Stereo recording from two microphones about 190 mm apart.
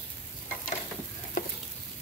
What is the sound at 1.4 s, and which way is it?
Stir, 50° left (ahead or behind).